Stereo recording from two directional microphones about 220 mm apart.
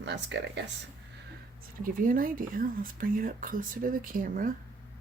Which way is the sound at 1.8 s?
40° right (ahead or behind).